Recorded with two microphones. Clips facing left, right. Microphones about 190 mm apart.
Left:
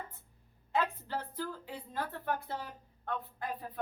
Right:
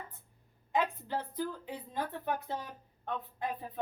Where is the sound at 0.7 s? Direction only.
15° right (ahead or behind).